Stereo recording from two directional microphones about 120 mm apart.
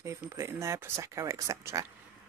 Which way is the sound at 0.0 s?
25° right (ahead or behind).